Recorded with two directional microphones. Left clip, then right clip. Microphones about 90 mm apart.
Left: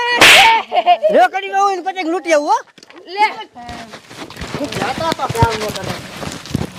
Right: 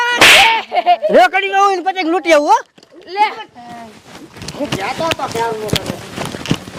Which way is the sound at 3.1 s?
30° right (ahead or behind).